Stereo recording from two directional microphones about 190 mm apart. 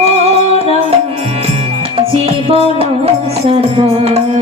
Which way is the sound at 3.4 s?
35° right (ahead or behind).